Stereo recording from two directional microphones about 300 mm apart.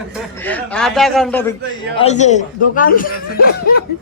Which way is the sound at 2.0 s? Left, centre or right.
Left.